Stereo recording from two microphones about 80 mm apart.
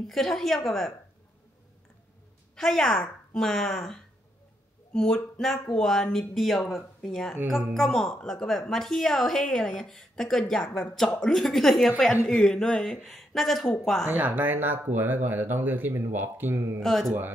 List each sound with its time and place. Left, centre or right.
0.0 s speech: centre
2.5 s a woman's voice: centre
14.0 s speech: right
16.8 s speech: centre